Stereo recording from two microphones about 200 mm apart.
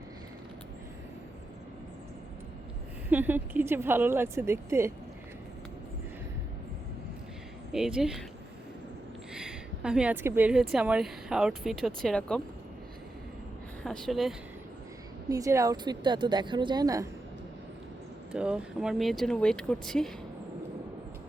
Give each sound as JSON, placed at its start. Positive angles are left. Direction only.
{"t": 3.1, "sound": "speech", "side_deg": -10}
{"t": 7.7, "sound": "a woman's voice", "side_deg": -5}
{"t": 9.3, "sound": "a woman's voice", "side_deg": -5}
{"t": 13.8, "sound": "a woman's voice", "side_deg": 0}
{"t": 15.3, "sound": "a woman's voice", "side_deg": -15}
{"t": 18.3, "sound": "a woman's voice", "side_deg": -5}